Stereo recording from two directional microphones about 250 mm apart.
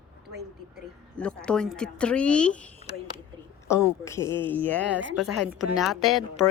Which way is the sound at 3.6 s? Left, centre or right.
Centre.